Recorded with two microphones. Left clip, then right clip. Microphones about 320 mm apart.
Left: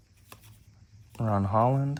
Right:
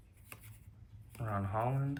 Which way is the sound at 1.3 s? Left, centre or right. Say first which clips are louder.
Left 11 dB; left.